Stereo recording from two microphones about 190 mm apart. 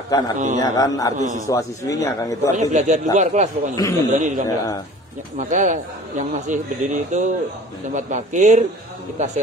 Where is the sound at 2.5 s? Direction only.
40° right (ahead or behind).